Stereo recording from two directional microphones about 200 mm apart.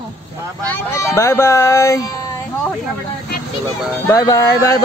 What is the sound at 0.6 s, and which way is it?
Speech, 10° left (ahead or behind).